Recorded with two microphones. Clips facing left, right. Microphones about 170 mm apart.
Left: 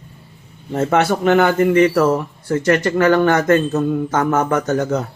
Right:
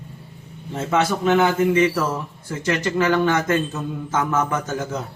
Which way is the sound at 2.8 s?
55° left (ahead or behind).